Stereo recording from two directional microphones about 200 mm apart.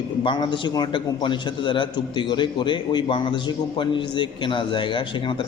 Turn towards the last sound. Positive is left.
turn(degrees=25)  # may be behind; listen again after turning